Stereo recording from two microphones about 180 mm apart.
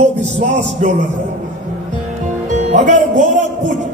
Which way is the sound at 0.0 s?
40° right (ahead or behind).